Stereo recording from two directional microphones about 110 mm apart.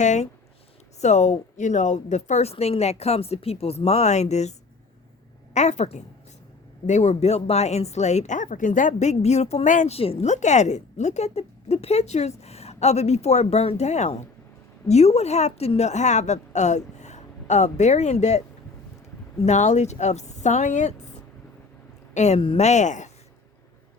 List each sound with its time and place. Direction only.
0.0 s a woman's voice: 90° left
5.5 s a woman's voice: 90° left
14.8 s a woman's voice: 75° left (ahead or behind)
22.1 s a woman's voice: 90° left